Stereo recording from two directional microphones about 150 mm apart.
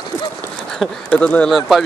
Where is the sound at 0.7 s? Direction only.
5° left (ahead or behind).